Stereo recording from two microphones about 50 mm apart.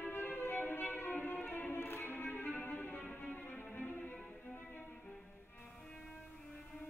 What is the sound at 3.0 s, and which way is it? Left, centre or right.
Music, left.